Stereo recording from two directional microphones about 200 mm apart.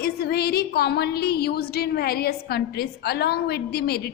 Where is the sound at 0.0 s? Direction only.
50° left (ahead or behind).